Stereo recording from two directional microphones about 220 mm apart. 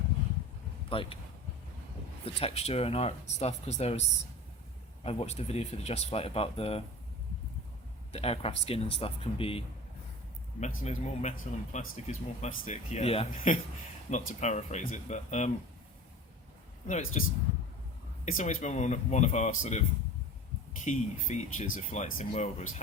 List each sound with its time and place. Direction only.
0.9 s speech: 25° left (ahead or behind)
2.2 s speech: 25° left (ahead or behind)
5.0 s speech: 30° left (ahead or behind)
8.1 s speech: 25° left (ahead or behind)
16.8 s speech: 35° left (ahead or behind)
18.3 s speech: 35° left (ahead or behind)
20.8 s speech: 30° left (ahead or behind)